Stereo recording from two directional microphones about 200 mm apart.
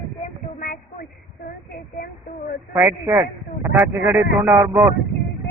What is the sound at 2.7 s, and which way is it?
Speech, 15° right (ahead or behind).